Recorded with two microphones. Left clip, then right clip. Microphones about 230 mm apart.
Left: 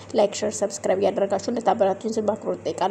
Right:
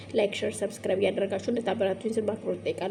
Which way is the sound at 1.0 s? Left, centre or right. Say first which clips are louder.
Left 5 dB; left.